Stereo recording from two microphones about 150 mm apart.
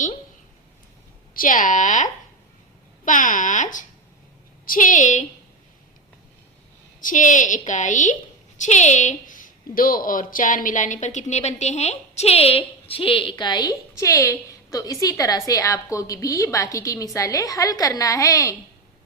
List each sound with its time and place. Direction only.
1.3 s a woman's voice: 65° left (ahead or behind)
7.0 s a woman's voice: 60° left (ahead or behind); by 18.5 s 20° left (ahead or behind)